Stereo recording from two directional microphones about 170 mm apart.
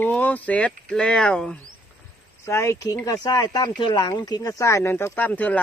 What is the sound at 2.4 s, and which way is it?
Speech, 15° left (ahead or behind).